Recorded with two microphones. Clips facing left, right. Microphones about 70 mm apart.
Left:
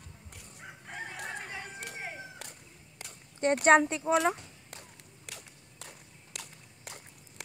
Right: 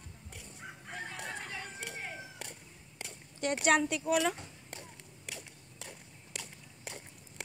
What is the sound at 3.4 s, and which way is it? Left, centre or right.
Speech, left.